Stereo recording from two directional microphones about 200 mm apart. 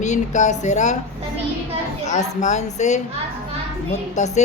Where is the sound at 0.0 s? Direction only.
35° left (ahead or behind).